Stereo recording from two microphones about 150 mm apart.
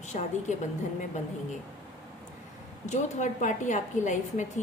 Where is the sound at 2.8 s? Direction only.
55° left (ahead or behind).